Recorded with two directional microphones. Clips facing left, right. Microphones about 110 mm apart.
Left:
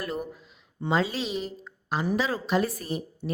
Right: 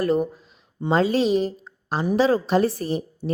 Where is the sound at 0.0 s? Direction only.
40° right (ahead or behind).